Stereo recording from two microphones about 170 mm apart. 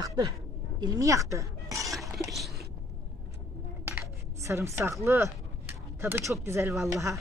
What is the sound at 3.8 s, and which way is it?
Dishes, 15° right (ahead or behind).